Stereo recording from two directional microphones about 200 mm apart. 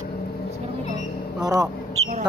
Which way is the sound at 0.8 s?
35° left (ahead or behind).